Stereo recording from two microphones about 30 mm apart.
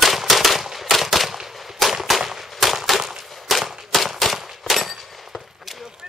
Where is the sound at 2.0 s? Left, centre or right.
Centre.